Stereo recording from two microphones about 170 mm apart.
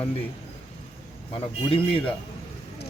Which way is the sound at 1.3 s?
30° left (ahead or behind).